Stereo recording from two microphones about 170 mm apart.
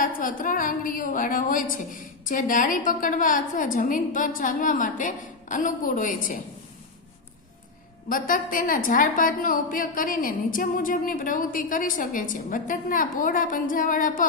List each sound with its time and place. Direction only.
0.0 s a woman's voice: 55° left (ahead or behind)
8.1 s a woman's voice: 55° left (ahead or behind)